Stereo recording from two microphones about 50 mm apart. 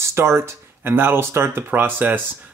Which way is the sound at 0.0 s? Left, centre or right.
Right.